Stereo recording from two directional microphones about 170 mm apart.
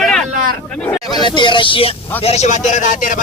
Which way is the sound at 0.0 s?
5° left (ahead or behind).